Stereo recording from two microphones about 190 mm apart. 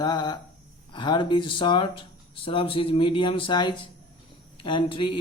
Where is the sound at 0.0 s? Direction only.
20° left (ahead or behind).